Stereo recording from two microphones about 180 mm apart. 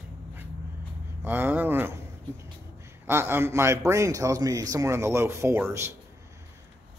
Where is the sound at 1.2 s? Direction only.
10° right (ahead or behind).